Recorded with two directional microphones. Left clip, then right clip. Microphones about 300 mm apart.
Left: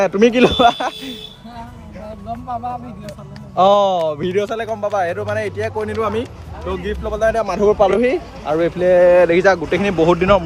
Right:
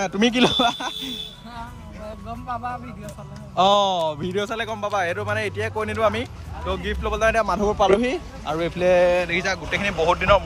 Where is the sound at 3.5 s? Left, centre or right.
Centre.